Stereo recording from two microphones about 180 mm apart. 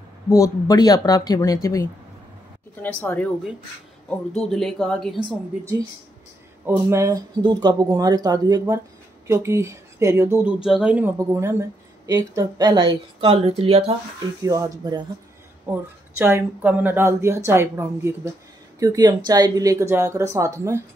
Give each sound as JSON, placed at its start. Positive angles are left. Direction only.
{"t": 0.3, "sound": "speech", "side_deg": 20}
{"t": 2.7, "sound": "speech", "side_deg": 10}
{"t": 4.4, "sound": "speech", "side_deg": 0}
{"t": 6.6, "sound": "speech", "side_deg": -15}
{"t": 14.4, "sound": "speech", "side_deg": -20}